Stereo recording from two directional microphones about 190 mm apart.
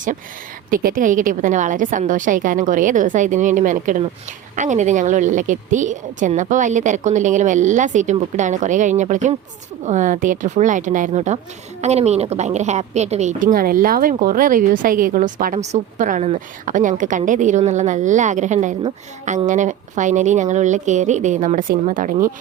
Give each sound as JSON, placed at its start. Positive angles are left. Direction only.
{"t": 0.7, "sound": "a woman's voice", "side_deg": -50}